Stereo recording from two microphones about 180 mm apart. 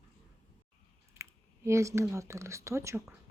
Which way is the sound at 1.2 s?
15° right (ahead or behind).